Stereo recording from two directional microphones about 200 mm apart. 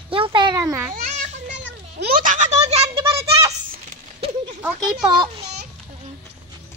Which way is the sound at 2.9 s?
15° right (ahead or behind).